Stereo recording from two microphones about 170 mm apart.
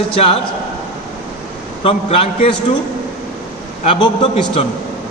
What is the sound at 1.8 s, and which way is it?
Speech, 35° left (ahead or behind).